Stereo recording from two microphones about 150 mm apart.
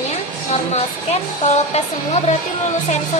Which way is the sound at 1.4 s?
45° left (ahead or behind).